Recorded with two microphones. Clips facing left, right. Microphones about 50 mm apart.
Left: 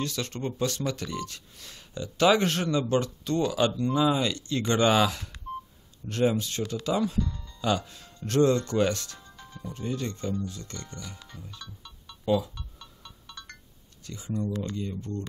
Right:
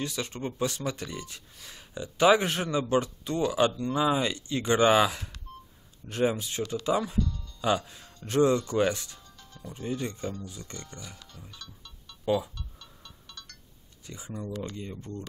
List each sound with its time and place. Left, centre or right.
0.0 s speech: centre
7.2 s speech: left
7.6 s speech: centre
9.2 s music: left
9.8 s speech: centre
11.6 s music: centre
14.0 s speech: centre